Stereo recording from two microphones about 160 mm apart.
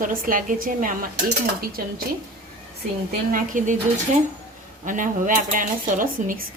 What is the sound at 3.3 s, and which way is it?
Speech, 55° right (ahead or behind).